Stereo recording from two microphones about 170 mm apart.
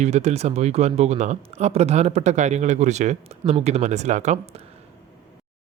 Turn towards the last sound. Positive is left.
turn(degrees=-40)  # may be behind; listen again after turning